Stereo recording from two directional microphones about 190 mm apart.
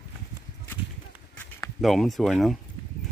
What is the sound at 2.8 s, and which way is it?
Chop, 20° left (ahead or behind).